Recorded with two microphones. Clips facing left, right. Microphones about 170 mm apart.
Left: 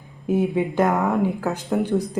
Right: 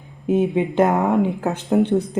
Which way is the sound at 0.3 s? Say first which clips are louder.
Right 2 dB; 20° right (ahead or behind).